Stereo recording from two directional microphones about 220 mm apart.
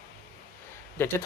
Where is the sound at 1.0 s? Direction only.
10° left (ahead or behind).